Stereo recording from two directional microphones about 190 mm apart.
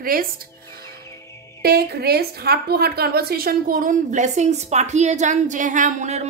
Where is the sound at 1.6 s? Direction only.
55° right (ahead or behind).